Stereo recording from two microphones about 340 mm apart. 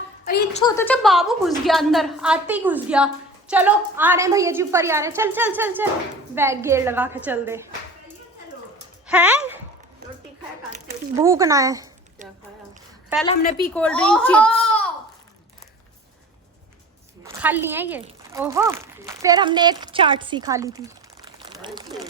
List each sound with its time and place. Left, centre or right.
0.6 s a woman's voice: centre
9.0 s speech: centre
11.2 s speech: centre
12.2 s a sound: right
13.2 s a woman's voice: left
13.7 s a woman's voice: centre
17.4 s a woman's voice: centre
21.2 s a sound: centre